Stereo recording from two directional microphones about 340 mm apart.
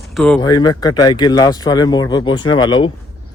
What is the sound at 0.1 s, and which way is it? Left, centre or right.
Speech, centre.